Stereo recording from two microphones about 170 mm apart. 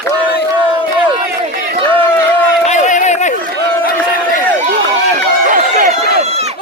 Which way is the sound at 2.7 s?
45° left (ahead or behind).